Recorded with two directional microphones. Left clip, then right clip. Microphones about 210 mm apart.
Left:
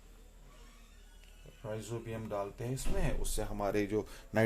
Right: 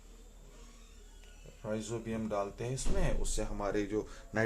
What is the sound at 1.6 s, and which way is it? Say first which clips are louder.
Speech: right 3 dB; 20° left (ahead or behind).